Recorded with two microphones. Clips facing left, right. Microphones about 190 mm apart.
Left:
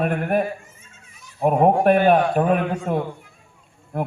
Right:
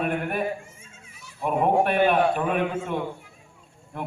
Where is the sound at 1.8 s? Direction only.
45° left (ahead or behind).